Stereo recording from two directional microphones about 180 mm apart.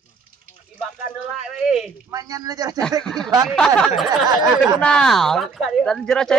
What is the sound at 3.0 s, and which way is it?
Speech, 5° left (ahead or behind).